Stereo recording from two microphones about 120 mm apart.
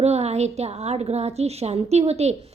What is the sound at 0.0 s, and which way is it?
A woman's voice, 65° right (ahead or behind).